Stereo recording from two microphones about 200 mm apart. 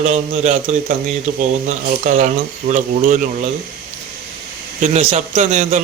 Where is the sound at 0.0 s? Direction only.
35° right (ahead or behind).